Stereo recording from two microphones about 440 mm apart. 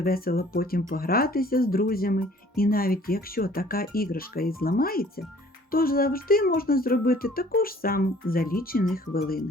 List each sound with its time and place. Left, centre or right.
0.0 s speech: centre